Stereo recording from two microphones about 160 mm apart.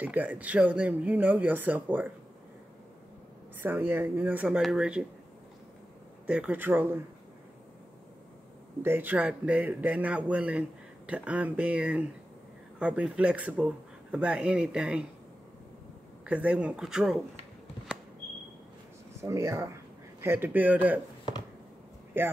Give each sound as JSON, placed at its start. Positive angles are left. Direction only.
{"t": 0.0, "sound": "speech", "side_deg": -10}
{"t": 3.6, "sound": "speech", "side_deg": -15}
{"t": 6.2, "sound": "speech", "side_deg": -5}
{"t": 8.8, "sound": "speech", "side_deg": -10}
{"t": 16.3, "sound": "speech", "side_deg": -5}
{"t": 19.2, "sound": "speech", "side_deg": -20}
{"t": 22.2, "sound": "speech", "side_deg": -15}